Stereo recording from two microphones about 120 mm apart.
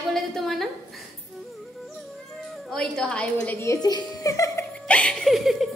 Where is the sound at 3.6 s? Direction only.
30° left (ahead or behind).